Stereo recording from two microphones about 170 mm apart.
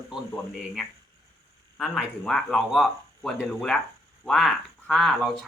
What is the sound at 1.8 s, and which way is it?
Speech, centre (ahead or behind).